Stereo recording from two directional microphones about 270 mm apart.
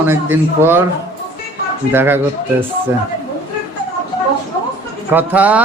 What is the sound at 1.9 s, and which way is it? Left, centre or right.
Speech, centre.